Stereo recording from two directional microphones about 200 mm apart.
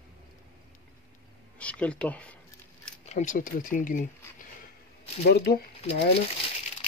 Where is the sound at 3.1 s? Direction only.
40° left (ahead or behind).